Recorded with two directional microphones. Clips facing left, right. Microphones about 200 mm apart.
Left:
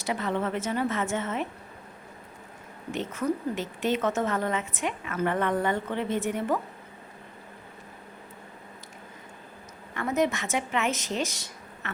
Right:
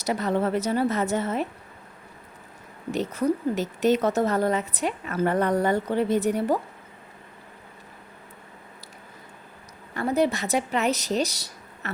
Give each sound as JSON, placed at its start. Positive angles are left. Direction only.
{"t": 0.0, "sound": "a woman's voice", "side_deg": -40}
{"t": 2.9, "sound": "a woman's voice", "side_deg": -35}
{"t": 9.9, "sound": "speech", "side_deg": -35}